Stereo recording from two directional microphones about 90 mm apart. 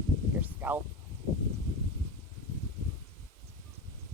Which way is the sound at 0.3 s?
20° right (ahead or behind).